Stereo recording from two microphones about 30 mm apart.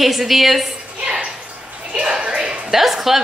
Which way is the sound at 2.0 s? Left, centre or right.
Right.